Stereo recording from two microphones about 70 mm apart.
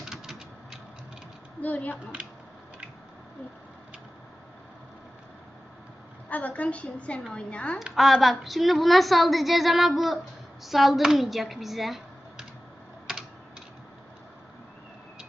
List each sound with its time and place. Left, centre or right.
0.0 s a sound: centre
1.6 s a woman's voice: left
6.2 s a woman's voice: left
7.9 s a woman's voice: centre